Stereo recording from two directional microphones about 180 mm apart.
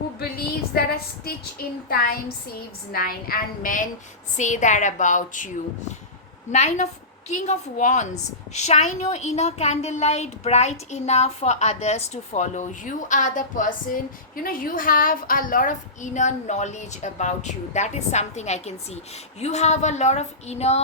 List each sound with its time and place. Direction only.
0.7 s a woman's voice: 60° left (ahead or behind)
6.5 s a woman's voice: 40° left (ahead or behind)